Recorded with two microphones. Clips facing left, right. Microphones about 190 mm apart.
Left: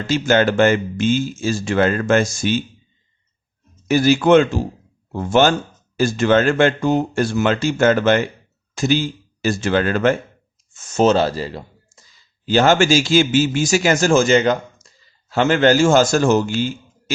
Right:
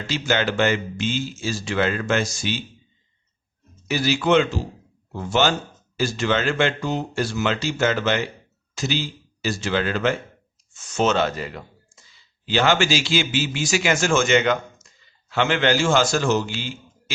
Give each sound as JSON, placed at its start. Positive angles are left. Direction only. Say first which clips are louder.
{"t": 0.1, "sound": "speech", "louder": "left 7 dB", "side_deg": 45}
{"t": 3.8, "sound": "speech", "louder": "left 7 dB", "side_deg": 50}
{"t": 12.1, "sound": "a man's voice", "louder": "left 6 dB", "side_deg": 45}